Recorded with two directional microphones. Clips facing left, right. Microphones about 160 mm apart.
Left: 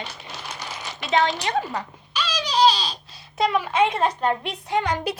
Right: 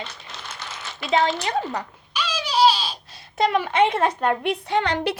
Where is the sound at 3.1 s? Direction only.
60° right (ahead or behind).